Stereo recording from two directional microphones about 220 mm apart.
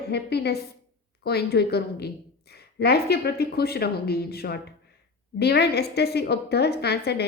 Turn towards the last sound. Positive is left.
turn(degrees=50)  # may be behind; listen again after turning